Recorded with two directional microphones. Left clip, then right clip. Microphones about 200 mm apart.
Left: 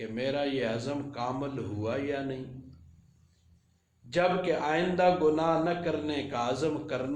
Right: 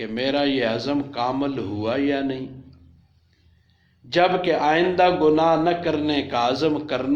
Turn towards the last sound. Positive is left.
turn(degrees=-25)  # may be behind; listen again after turning